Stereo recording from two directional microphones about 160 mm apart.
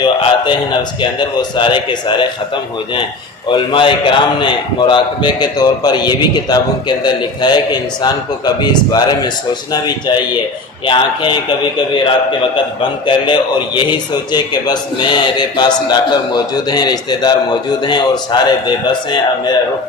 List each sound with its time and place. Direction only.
0.0 s a man's voice: 30° left (ahead or behind)
3.5 s a man's voice: 30° left (ahead or behind)
13.1 s a man's voice: 30° left (ahead or behind)